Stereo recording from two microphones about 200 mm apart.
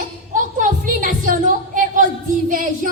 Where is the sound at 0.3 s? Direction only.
40° right (ahead or behind).